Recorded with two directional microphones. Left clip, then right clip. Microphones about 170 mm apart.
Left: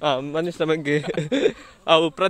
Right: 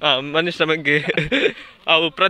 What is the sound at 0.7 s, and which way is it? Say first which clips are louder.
Speech: right 5 dB; 15° left (ahead or behind).